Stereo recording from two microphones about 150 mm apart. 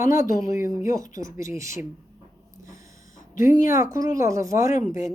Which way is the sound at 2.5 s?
20° right (ahead or behind).